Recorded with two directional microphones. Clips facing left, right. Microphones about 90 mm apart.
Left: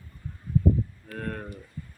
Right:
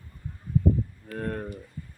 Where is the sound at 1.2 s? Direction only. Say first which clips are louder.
Right 3 dB; 20° right (ahead or behind).